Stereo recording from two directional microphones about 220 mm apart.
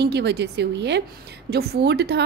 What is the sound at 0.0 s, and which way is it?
A woman's voice, 50° right (ahead or behind).